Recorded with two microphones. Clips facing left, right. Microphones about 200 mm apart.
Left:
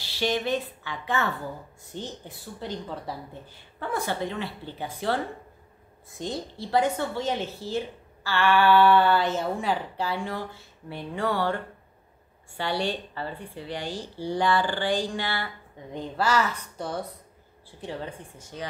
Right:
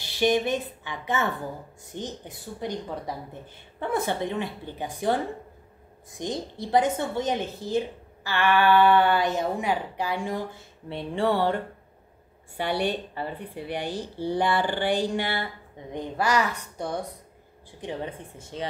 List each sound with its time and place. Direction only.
0.0 s a woman's voice: 20° right (ahead or behind)
3.8 s a woman's voice: 20° right (ahead or behind)
12.8 s a woman's voice: 20° right (ahead or behind)